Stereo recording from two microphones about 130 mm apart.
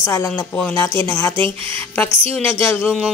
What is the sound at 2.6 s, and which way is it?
Speech, 20° left (ahead or behind).